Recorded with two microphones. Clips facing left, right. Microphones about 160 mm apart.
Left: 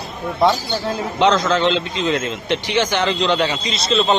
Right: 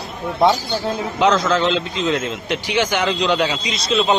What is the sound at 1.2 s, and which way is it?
A man's voice, 5° right (ahead or behind).